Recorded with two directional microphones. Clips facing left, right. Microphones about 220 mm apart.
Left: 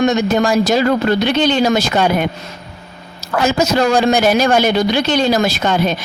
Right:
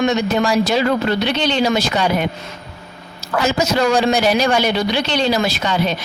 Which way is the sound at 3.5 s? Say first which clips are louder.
Left 2 dB; 50° left (ahead or behind).